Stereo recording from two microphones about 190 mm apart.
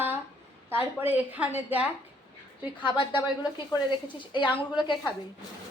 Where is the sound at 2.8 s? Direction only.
25° left (ahead or behind).